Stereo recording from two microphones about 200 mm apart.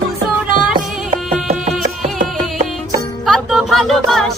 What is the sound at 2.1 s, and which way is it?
Music, 40° right (ahead or behind).